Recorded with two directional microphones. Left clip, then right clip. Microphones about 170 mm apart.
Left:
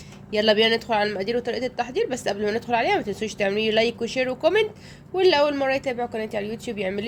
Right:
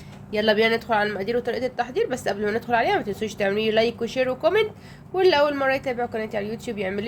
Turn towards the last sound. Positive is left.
turn(degrees=10)  # may be behind; listen again after turning